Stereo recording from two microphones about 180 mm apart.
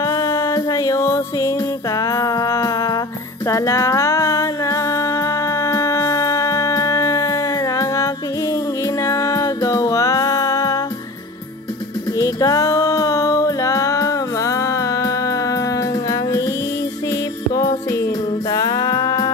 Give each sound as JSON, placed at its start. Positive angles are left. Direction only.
{"t": 0.0, "sound": "music", "side_deg": 20}
{"t": 12.2, "sound": "music", "side_deg": 20}